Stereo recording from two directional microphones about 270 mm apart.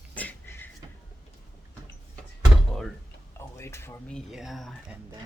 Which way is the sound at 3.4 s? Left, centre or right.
Centre.